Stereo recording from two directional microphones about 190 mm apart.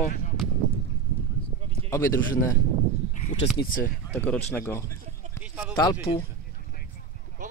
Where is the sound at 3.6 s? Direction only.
45° left (ahead or behind).